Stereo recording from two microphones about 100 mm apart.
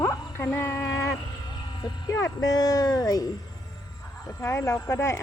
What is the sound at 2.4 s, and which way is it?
Speech, 40° left (ahead or behind).